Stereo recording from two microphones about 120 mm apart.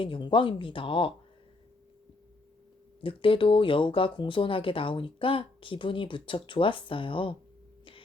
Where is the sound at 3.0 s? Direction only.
45° left (ahead or behind).